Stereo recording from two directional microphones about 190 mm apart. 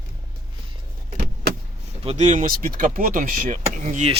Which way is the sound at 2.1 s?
40° right (ahead or behind).